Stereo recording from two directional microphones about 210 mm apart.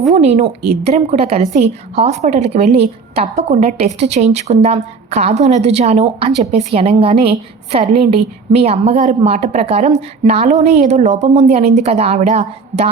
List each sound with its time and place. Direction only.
0.1 s a woman's voice: 35° right (ahead or behind)